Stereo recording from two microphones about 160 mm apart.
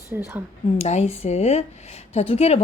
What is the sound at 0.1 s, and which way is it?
Speech, 10° right (ahead or behind).